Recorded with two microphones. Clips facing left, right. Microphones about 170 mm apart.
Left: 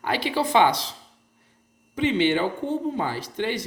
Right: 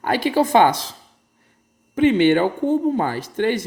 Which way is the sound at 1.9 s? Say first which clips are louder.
Right 7 dB; 50° right (ahead or behind).